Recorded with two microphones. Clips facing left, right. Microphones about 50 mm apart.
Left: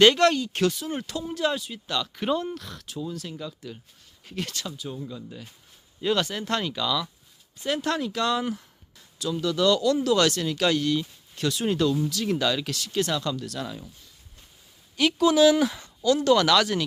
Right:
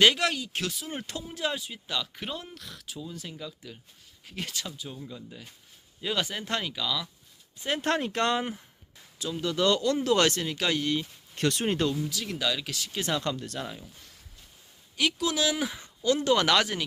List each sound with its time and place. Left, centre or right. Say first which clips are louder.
0.0 s speech: left 5 dB; centre
7.6 s speech: left 1 dB; right
9.1 s speech: left 3 dB; right
11.3 s speech: even; right
11.6 s speech: left 7 dB; right
12.2 s speech: left 6 dB; centre
12.7 s speech: left 7 dB; centre
13.1 s speech: left 2 dB; right
14.9 s speech: left 8 dB; centre
15.6 s speech: left 7 dB; centre
16.0 s speech: left 4 dB; right